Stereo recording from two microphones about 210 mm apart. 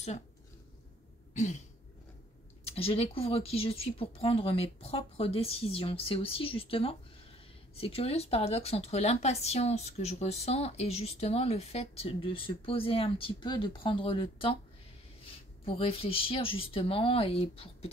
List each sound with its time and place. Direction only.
1.3 s throat clearing: 35° left (ahead or behind)
2.7 s speech: 30° left (ahead or behind)
15.6 s speech: 25° left (ahead or behind)